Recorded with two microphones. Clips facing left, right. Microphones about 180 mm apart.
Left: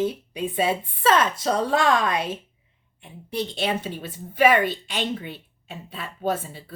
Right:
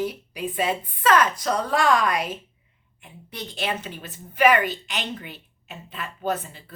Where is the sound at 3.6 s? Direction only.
30° left (ahead or behind).